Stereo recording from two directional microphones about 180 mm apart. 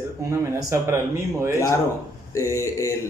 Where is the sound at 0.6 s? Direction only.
20° right (ahead or behind).